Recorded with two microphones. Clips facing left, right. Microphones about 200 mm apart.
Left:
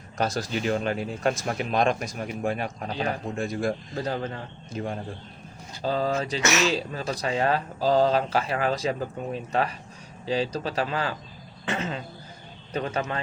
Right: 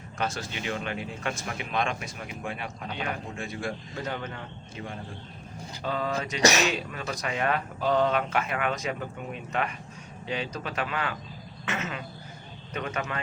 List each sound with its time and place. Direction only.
0.2 s speech: 40° left (ahead or behind)
5.8 s speech: 30° left (ahead or behind)
6.4 s speech: 35° right (ahead or behind)
6.7 s speech: 30° left (ahead or behind)